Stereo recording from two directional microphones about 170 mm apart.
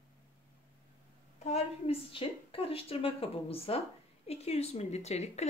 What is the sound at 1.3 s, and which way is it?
A woman's voice, 40° left (ahead or behind).